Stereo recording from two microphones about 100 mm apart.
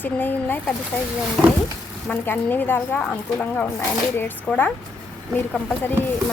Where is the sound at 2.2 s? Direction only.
20° left (ahead or behind).